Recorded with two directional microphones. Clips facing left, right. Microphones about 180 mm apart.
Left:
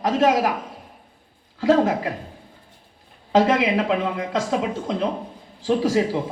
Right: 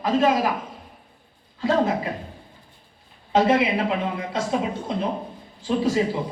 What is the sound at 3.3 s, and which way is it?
A man's voice, 90° left.